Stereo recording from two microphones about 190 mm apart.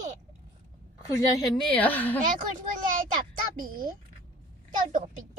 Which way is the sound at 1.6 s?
10° left (ahead or behind).